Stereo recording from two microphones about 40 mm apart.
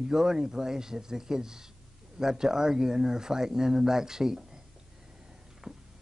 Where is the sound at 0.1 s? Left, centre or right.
Centre.